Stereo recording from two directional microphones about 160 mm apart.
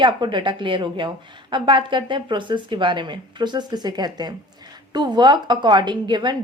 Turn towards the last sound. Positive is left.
turn(degrees=-30)  # may be behind; listen again after turning